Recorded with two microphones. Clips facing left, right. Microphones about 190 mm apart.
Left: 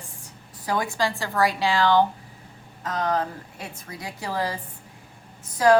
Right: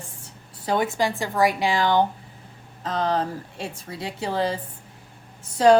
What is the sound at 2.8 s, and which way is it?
A woman's voice, 30° right (ahead or behind).